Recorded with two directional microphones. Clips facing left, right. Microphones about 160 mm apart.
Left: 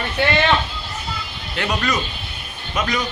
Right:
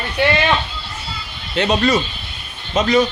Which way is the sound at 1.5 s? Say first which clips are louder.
Right 6 dB; 25° right (ahead or behind).